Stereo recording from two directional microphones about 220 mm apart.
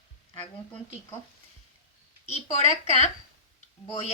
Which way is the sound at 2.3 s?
30° left (ahead or behind).